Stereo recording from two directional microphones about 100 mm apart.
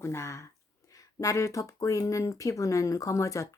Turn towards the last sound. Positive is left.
turn(degrees=30)  # may be behind; listen again after turning